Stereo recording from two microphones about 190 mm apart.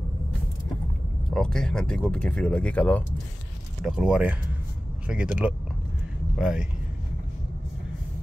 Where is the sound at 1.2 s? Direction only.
5° left (ahead or behind).